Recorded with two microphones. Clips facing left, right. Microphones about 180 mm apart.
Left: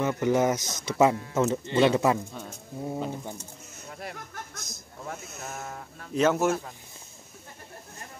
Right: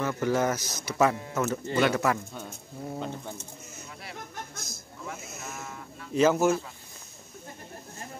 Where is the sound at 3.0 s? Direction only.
10° left (ahead or behind).